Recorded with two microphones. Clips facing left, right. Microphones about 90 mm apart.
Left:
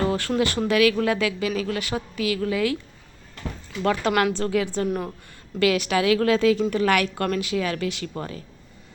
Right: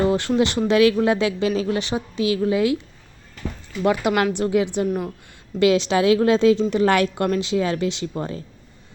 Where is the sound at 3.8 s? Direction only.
15° right (ahead or behind).